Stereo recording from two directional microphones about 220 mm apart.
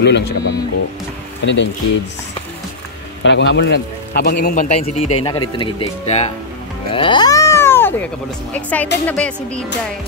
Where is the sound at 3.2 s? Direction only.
55° left (ahead or behind).